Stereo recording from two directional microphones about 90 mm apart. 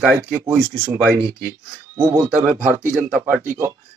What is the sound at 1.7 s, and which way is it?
Speech, 30° right (ahead or behind).